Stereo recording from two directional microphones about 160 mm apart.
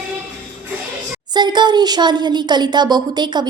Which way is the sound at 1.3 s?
25° right (ahead or behind).